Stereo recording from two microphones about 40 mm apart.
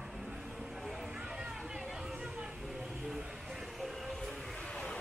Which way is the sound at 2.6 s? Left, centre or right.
Centre.